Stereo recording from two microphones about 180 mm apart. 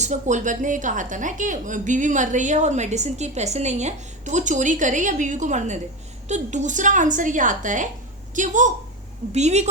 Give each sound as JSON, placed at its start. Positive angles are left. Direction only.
{"t": 0.0, "sound": "a woman's voice", "side_deg": -40}